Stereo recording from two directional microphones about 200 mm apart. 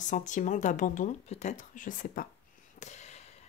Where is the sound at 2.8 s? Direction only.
35° left (ahead or behind).